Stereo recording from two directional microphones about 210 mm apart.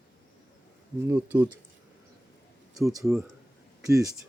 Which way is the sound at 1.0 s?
10° right (ahead or behind).